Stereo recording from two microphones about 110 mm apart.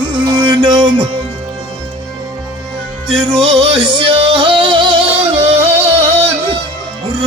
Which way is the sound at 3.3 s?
50° right (ahead or behind).